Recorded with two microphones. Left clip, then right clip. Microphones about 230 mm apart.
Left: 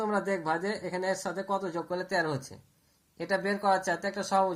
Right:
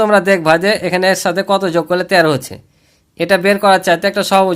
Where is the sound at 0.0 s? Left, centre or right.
Right.